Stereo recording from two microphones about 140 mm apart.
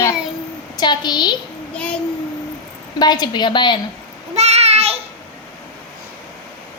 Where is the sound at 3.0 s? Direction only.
30° left (ahead or behind).